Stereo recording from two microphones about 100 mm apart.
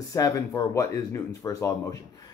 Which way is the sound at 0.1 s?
35° left (ahead or behind).